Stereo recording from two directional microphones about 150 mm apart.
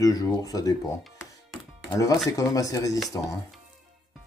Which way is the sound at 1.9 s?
25° left (ahead or behind).